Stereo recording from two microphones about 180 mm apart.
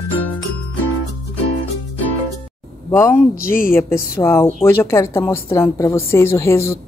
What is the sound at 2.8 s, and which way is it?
Speech, 15° left (ahead or behind).